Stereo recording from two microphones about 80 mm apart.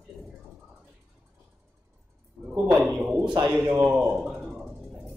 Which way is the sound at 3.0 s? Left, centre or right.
Centre.